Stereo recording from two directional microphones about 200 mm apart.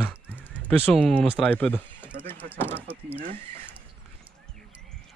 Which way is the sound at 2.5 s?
10° left (ahead or behind).